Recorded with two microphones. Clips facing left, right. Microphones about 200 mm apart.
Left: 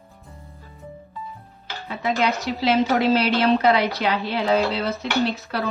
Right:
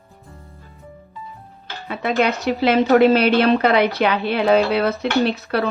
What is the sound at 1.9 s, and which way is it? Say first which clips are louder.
Dishes: right 3 dB; 60° right (ahead or behind).